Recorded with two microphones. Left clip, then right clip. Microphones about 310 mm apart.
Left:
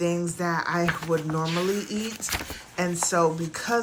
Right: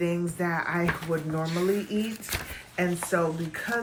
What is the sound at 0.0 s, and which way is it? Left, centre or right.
Speech, centre.